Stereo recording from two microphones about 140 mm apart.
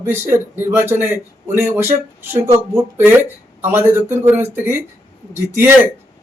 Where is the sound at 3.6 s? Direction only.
15° right (ahead or behind).